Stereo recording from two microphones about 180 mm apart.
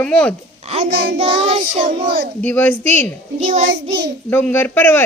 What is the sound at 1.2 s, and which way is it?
Child singing, 35° right (ahead or behind).